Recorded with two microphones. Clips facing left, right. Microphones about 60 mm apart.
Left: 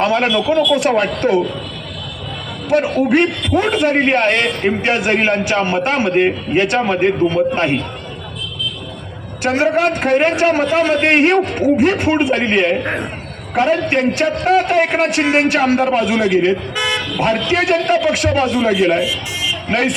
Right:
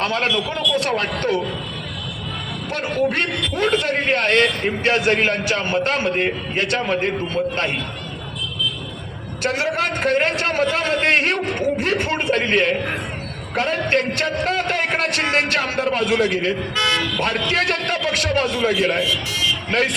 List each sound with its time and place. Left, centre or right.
0.0 s a man's voice: centre
2.6 s a man's voice: centre
9.7 s a man's voice: left
12.8 s a man's voice: left
13.5 s a man's voice: centre